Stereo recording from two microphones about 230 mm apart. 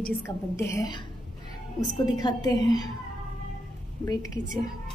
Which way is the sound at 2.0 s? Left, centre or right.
Centre.